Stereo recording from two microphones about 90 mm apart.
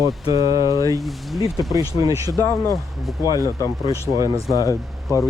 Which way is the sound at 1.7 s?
40° right (ahead or behind).